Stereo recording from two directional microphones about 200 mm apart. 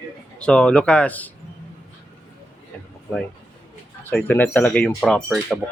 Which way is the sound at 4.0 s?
10° left (ahead or behind).